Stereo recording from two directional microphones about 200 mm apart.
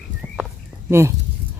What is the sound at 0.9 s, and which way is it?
Speech, 10° right (ahead or behind).